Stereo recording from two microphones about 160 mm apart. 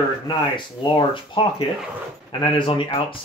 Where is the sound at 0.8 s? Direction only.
30° left (ahead or behind).